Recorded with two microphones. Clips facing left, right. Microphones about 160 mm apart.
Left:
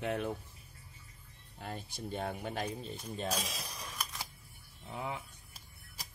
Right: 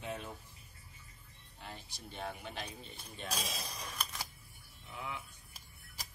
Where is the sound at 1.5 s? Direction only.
50° left (ahead or behind).